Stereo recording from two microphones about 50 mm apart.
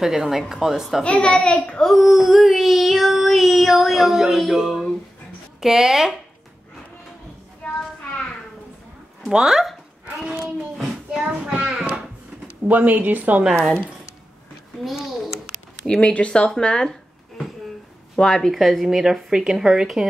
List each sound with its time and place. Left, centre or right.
0.0 s speech: centre
1.0 s speech: left
1.8 s child singing: centre
5.6 s speech: centre
7.6 s a sound: left
9.3 s speech: centre
10.3 s a sound: centre
11.1 s a sound: right
12.6 s speech: right
14.8 s a sound: centre
16.0 s speech: left
18.1 s speech: centre
18.5 s child singing: centre